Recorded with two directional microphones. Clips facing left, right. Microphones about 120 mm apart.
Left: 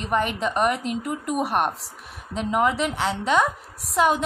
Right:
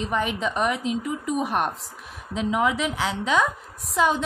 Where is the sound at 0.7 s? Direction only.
60° left (ahead or behind).